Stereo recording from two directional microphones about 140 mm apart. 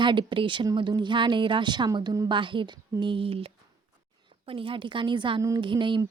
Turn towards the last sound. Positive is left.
turn(degrees=-35)  # may be behind; listen again after turning